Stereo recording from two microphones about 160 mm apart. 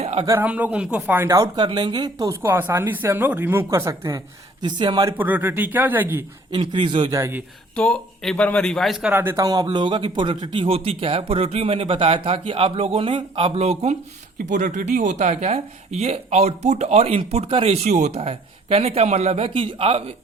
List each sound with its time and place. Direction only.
0.0 s a sound: 40° right (ahead or behind)
0.3 s speech: 10° right (ahead or behind); by 5.1 s 25° right (ahead or behind)
5.1 s speech: 10° right (ahead or behind)
6.5 s speech: 30° right (ahead or behind)
7.2 s speech: 15° right (ahead or behind)
7.8 s speech: 5° left (ahead or behind); by 13.9 s 40° right (ahead or behind)
14.3 s speech: 50° right (ahead or behind); by 20.1 s 35° right (ahead or behind)